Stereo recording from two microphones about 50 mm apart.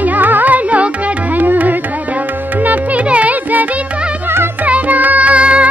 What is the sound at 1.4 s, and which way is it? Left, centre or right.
Music, right.